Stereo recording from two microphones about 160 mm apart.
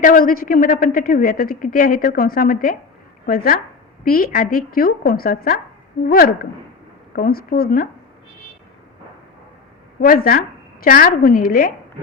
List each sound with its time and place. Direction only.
0.0 s a woman's voice: 60° left (ahead or behind)
10.0 s a woman's voice: 65° left (ahead or behind)